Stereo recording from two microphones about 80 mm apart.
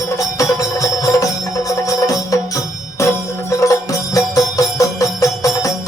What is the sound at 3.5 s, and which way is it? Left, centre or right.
Music, left.